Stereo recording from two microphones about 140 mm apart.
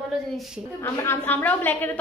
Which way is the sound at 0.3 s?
Centre (ahead or behind).